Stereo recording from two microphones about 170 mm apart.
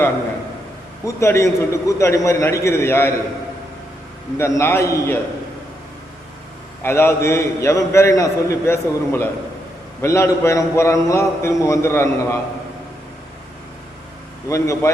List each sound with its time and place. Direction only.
1.0 s a man's voice: 15° left (ahead or behind)
4.4 s a man's voice: 15° left (ahead or behind)
6.8 s a man's voice: 15° left (ahead or behind)
14.4 s a man's voice: 20° left (ahead or behind)